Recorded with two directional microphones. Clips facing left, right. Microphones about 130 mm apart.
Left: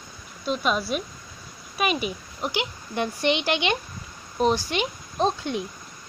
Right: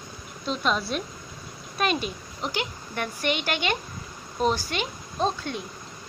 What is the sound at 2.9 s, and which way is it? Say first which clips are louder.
Speech: left 4 dB; 25° left (ahead or behind).